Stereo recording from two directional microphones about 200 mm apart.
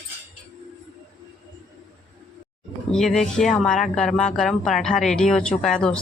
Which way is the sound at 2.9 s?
Centre (ahead or behind).